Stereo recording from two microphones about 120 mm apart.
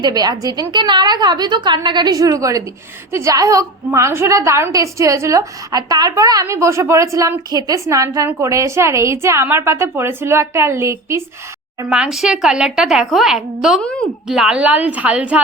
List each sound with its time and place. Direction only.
0.0 s a woman's voice: 35° right (ahead or behind)
11.9 s a woman's voice: 5° right (ahead or behind)